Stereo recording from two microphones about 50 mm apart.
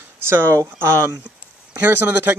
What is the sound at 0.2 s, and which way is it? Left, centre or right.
Speech, right.